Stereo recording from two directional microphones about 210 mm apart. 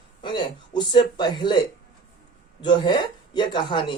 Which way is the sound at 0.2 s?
20° left (ahead or behind).